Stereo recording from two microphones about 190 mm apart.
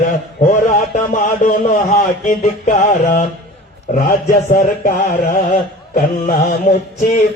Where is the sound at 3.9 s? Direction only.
45° left (ahead or behind).